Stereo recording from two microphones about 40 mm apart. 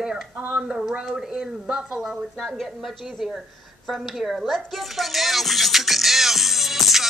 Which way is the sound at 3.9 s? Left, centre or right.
Centre.